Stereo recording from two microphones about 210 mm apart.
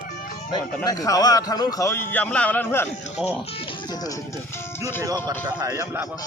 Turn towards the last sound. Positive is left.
turn(degrees=-15)  # may be behind; listen again after turning